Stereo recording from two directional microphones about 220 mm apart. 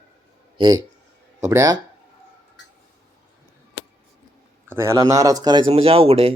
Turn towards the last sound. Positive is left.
turn(degrees=-25)  # may be behind; listen again after turning